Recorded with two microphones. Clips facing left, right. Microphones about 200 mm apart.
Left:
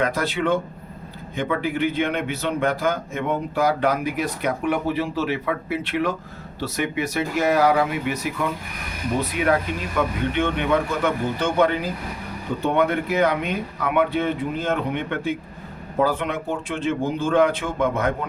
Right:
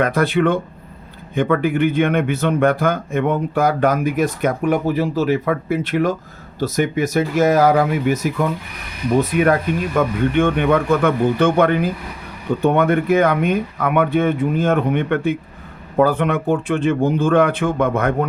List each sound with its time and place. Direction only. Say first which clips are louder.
0.0 s a man's voice: right 6 dB; 55° right (ahead or behind)